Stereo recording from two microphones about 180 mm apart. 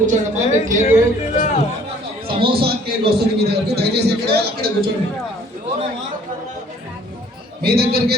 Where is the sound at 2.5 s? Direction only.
60° right (ahead or behind).